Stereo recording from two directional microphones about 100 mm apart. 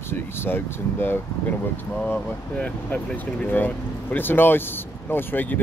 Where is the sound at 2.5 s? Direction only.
10° left (ahead or behind).